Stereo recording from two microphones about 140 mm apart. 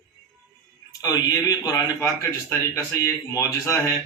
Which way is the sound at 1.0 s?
25° left (ahead or behind).